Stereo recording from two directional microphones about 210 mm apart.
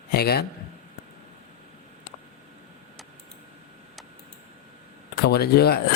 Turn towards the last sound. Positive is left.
turn(degrees=50)  # may be behind; listen again after turning